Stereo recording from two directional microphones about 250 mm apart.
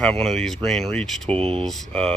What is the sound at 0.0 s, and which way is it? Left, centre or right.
Speech, centre.